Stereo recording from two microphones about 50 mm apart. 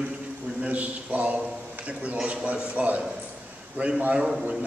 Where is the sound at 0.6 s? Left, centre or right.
Right.